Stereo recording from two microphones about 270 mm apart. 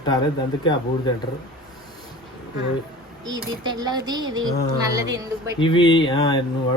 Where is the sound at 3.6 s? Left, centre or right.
Centre.